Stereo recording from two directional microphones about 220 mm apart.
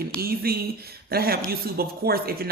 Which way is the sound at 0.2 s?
45° right (ahead or behind).